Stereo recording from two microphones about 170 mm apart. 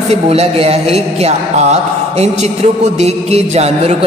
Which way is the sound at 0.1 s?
35° right (ahead or behind).